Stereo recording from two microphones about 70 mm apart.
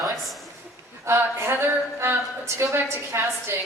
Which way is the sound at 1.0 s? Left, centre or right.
Right.